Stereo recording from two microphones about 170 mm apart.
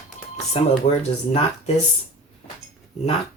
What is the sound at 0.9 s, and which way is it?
Speech, 45° left (ahead or behind).